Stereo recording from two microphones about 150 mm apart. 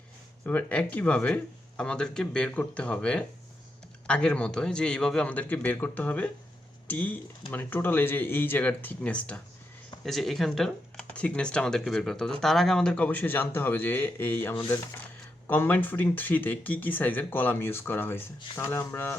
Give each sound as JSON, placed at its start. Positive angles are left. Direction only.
{"t": 0.4, "sound": "speech", "side_deg": 10}